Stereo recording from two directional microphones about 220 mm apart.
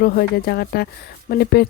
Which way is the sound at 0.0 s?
45° left (ahead or behind).